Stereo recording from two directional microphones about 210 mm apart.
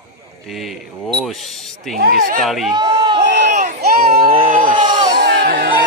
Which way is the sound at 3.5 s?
40° right (ahead or behind).